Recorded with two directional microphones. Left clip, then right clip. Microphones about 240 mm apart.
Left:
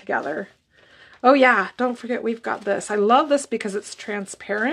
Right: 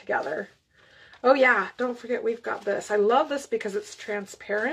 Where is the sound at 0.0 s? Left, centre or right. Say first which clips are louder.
Left 3 dB; left.